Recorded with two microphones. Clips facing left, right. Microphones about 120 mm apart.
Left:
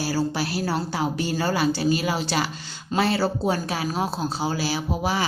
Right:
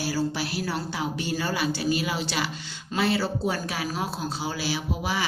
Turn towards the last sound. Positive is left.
turn(degrees=40)  # may be behind; listen again after turning